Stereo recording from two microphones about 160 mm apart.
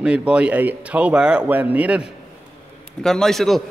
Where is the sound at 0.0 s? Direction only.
5° right (ahead or behind).